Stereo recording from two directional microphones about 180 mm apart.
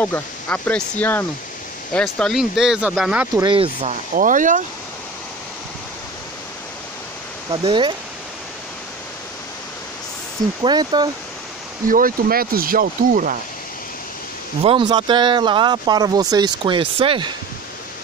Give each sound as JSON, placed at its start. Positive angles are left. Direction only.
{"t": 0.0, "sound": "speech", "side_deg": 10}
{"t": 3.3, "sound": "speech", "side_deg": -30}
{"t": 4.1, "sound": "speech", "side_deg": -45}
{"t": 7.5, "sound": "speech", "side_deg": -25}
{"t": 10.6, "sound": "speech", "side_deg": -25}
{"t": 11.9, "sound": "speech", "side_deg": -50}
{"t": 14.6, "sound": "speech", "side_deg": -30}